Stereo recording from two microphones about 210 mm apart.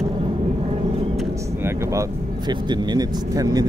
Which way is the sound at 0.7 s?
30° right (ahead or behind).